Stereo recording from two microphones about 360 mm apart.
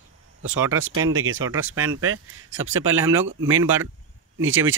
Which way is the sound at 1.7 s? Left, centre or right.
Right.